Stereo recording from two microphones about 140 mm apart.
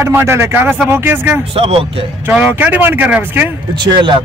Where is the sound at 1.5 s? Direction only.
40° right (ahead or behind).